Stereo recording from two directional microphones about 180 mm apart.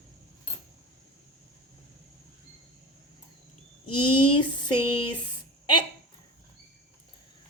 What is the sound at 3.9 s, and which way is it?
Speech, 25° left (ahead or behind).